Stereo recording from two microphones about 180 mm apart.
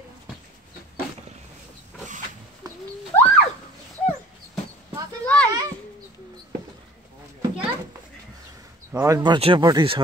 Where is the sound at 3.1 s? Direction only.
15° left (ahead or behind).